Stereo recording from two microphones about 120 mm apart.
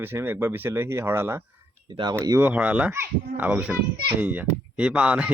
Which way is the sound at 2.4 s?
10° right (ahead or behind).